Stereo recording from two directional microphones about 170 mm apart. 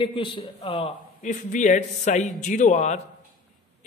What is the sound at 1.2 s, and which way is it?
A man's voice, 50° left (ahead or behind).